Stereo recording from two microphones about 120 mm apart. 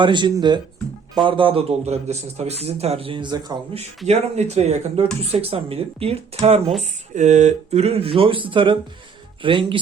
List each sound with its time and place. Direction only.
0.0 s speech: 40° right (ahead or behind)
3.8 s speech: 65° right (ahead or behind)
5.2 s speech: 55° right (ahead or behind)
7.1 s speech: 80° right; by 9.7 s 45° right (ahead or behind)